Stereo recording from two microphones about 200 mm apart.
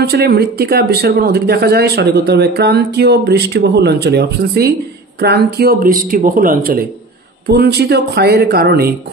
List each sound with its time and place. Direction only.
0.0 s speech: 50° right (ahead or behind)